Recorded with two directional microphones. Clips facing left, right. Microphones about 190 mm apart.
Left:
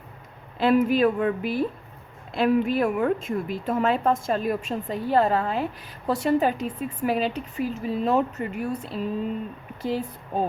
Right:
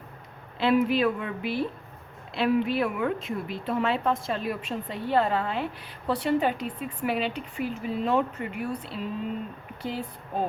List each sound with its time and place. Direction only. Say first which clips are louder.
0.6 s a woman's voice: left 3 dB; 45° left (ahead or behind)